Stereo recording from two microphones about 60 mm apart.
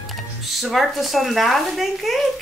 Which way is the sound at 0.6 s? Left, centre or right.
Centre.